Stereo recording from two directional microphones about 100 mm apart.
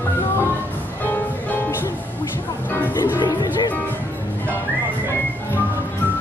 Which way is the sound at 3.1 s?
40° left (ahead or behind).